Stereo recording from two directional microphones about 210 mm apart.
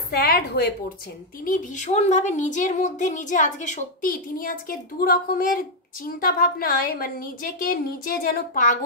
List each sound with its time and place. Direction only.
0.1 s a woman's voice: 45° left (ahead or behind)